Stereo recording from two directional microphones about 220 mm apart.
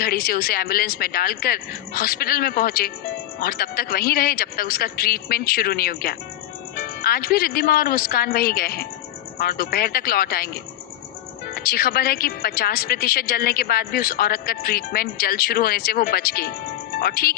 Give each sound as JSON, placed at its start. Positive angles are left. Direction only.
{"t": 0.0, "sound": "a woman's voice", "side_deg": 45}
{"t": 11.5, "sound": "a woman's voice", "side_deg": 45}